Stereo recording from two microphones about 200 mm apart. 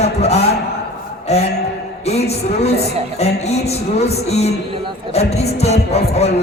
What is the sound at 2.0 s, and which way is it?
A man's voice, 30° left (ahead or behind).